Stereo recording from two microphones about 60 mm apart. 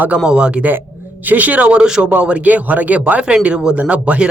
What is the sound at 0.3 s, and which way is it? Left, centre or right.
A man's voice, centre.